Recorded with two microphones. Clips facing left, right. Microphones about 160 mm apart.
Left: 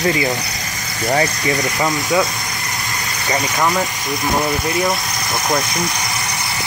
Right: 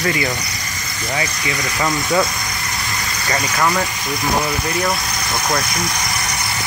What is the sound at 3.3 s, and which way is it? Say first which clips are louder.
Speech: left 1 dB; 20° left (ahead or behind).